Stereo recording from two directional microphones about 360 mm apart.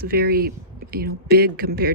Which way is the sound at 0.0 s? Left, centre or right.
Right.